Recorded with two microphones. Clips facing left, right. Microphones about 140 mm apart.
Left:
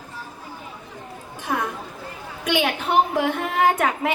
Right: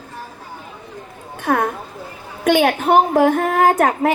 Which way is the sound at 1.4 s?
55° right (ahead or behind).